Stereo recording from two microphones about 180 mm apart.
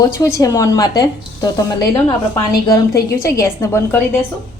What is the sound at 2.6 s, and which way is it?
Speech, 20° left (ahead or behind).